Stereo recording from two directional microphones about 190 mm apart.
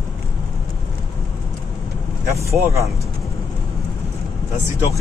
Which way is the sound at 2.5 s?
15° right (ahead or behind).